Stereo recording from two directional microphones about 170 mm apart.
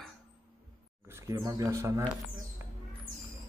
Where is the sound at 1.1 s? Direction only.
15° right (ahead or behind).